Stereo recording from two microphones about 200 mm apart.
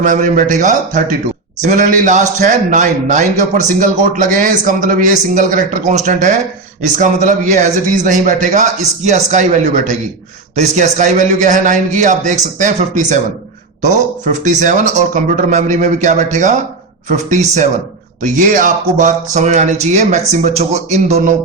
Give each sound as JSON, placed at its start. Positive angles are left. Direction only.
{"t": 0.0, "sound": "a man's voice", "side_deg": -40}
{"t": 14.4, "sound": "a man's voice", "side_deg": -40}